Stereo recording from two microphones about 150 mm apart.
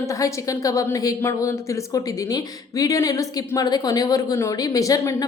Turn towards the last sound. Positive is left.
turn(degrees=25)  # may be behind; listen again after turning